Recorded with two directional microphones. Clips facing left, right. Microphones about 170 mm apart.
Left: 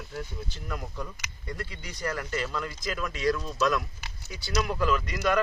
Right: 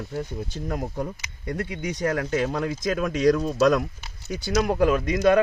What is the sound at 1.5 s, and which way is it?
Speech, 65° right (ahead or behind).